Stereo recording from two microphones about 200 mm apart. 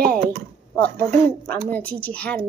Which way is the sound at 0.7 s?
5° left (ahead or behind).